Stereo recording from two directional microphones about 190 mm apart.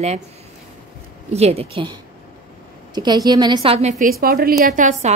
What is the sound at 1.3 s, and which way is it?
A woman's voice, 35° right (ahead or behind).